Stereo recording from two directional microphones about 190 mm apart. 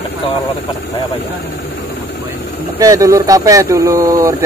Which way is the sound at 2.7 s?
20° right (ahead or behind).